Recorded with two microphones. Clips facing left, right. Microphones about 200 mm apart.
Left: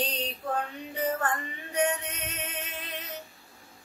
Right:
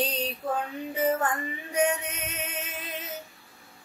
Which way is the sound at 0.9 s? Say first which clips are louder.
Right 4 dB; 10° right (ahead or behind).